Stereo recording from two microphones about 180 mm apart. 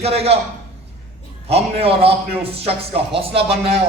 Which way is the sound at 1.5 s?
30° right (ahead or behind).